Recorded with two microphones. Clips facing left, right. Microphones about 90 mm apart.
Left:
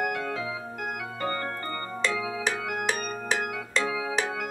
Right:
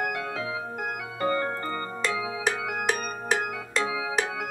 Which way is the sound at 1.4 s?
10° right (ahead or behind).